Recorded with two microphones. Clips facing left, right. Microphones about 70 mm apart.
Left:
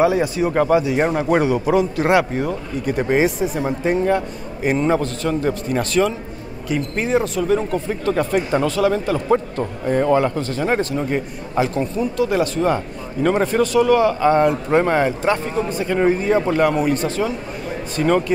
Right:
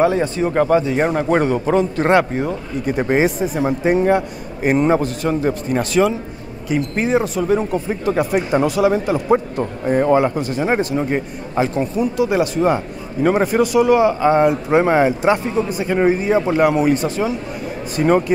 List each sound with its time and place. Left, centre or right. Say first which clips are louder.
0.0 s speech: even; centre
0.5 s speech: right 2 dB; centre
2.3 s speech: right 1 dB; centre
11.5 s speech: right 1 dB; centre